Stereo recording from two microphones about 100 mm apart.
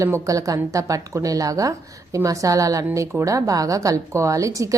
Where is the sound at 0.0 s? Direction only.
35° right (ahead or behind).